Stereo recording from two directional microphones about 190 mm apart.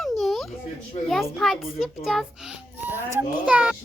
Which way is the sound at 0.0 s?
Centre (ahead or behind).